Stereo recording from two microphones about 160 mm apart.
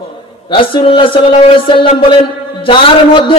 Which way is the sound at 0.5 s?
30° left (ahead or behind).